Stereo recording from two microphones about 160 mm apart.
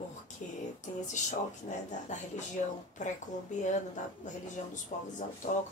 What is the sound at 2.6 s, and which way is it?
A woman's voice, 50° left (ahead or behind).